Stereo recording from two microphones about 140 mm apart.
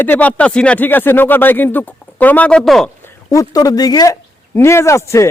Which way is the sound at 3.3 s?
25° left (ahead or behind).